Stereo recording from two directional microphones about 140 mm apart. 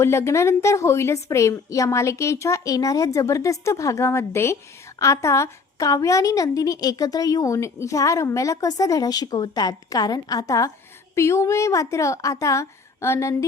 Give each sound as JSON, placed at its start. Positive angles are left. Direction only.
{"t": 0.0, "sound": "a woman's voice", "side_deg": 20}